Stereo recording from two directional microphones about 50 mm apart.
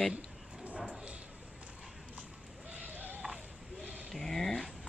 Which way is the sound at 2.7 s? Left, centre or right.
Right.